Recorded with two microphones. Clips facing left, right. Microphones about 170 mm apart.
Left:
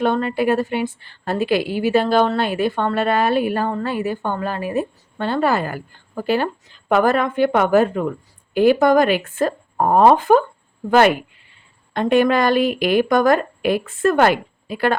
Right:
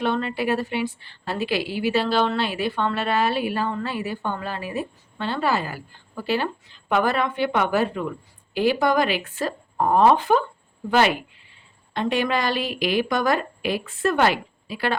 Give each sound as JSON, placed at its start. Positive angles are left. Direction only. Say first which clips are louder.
{"t": 0.0, "sound": "a woman's voice", "louder": "left 5 dB", "side_deg": 45}
{"t": 11.9, "sound": "a woman's voice", "louder": "left 7 dB", "side_deg": 50}